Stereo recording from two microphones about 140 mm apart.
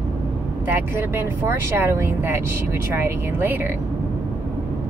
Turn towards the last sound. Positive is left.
turn(degrees=-15)  # may be behind; listen again after turning